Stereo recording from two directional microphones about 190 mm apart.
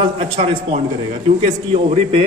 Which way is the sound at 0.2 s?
30° right (ahead or behind).